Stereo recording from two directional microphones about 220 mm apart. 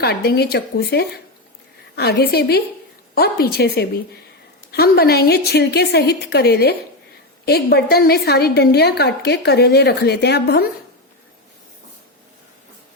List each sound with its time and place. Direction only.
0.0 s a woman's voice: 45° left (ahead or behind)